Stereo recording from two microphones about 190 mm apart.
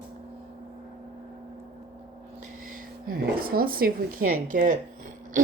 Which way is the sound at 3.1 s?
55° right (ahead or behind).